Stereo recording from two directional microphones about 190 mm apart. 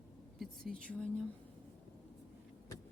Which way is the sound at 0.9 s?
5° left (ahead or behind).